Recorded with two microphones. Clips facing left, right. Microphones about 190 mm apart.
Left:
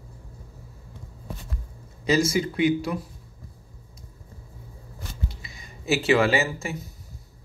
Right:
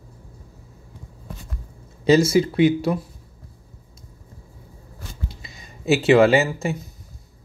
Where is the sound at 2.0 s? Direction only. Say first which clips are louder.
Right 6 dB; 30° right (ahead or behind).